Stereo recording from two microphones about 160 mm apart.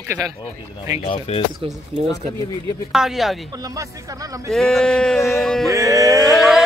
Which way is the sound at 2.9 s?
Centre (ahead or behind).